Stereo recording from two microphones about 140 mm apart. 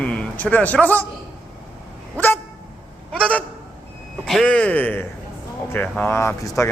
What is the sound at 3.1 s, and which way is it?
Honk, 10° left (ahead or behind).